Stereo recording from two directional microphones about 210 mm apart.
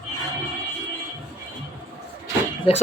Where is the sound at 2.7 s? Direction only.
25° left (ahead or behind).